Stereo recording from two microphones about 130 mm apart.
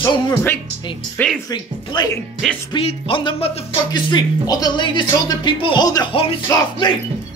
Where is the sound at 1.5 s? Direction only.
35° left (ahead or behind); by 3.6 s 50° left (ahead or behind).